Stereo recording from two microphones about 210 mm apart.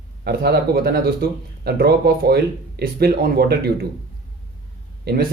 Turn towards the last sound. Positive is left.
turn(degrees=-50)  # may be behind; listen again after turning